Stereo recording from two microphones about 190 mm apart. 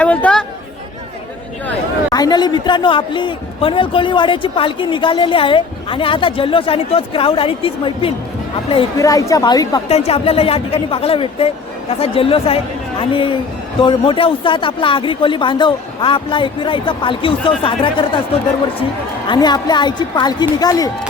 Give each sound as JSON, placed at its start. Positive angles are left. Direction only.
{"t": 0.0, "sound": "chatter", "side_deg": 5}
{"t": 2.1, "sound": "a man's voice", "side_deg": 20}
{"t": 9.0, "sound": "a man's voice", "side_deg": 15}
{"t": 9.9, "sound": "a man's voice", "side_deg": 35}
{"t": 19.3, "sound": "a man's voice", "side_deg": 20}